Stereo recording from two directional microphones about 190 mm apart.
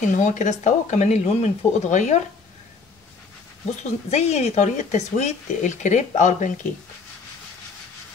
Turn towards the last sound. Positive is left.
turn(degrees=40)  # may be behind; listen again after turning